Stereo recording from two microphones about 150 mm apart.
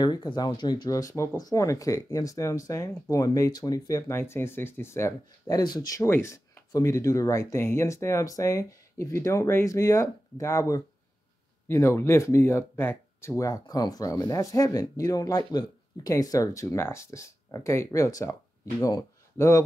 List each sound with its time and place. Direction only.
0.0 s speech: 30° left (ahead or behind)